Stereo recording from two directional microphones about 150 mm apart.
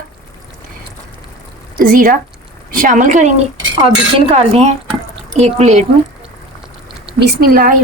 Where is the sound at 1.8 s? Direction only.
65° right (ahead or behind); by 5.8 s 50° right (ahead or behind).